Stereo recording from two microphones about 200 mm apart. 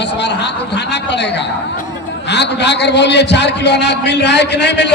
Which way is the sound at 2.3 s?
60° left (ahead or behind).